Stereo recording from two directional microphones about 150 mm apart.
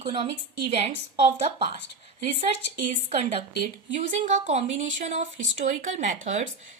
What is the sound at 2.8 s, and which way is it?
Speech, 45° right (ahead or behind).